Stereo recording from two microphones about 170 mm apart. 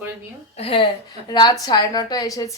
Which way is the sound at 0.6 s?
35° left (ahead or behind).